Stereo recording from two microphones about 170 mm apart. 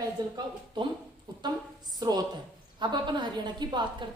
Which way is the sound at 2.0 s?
25° right (ahead or behind).